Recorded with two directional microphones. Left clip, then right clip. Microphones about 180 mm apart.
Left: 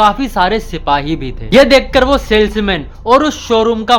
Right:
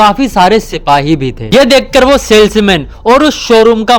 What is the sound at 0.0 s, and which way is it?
Speech, 35° right (ahead or behind).